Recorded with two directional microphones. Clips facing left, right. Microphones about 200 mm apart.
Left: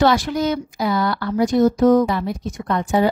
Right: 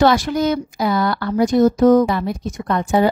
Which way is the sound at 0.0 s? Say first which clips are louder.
Right 2 dB; 40° right (ahead or behind).